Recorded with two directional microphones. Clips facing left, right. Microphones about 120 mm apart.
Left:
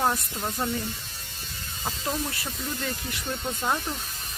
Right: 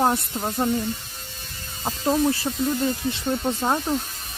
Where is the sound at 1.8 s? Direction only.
30° right (ahead or behind).